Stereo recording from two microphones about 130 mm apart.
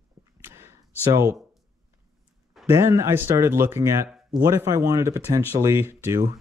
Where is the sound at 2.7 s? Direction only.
20° right (ahead or behind).